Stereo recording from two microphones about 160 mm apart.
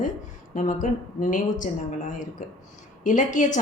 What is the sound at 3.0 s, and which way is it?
Speech, 50° left (ahead or behind).